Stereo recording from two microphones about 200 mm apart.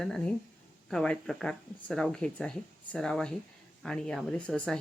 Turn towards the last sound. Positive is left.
turn(degrees=5)  # may be behind; listen again after turning